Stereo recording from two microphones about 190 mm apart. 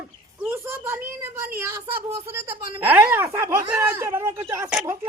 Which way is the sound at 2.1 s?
10° right (ahead or behind).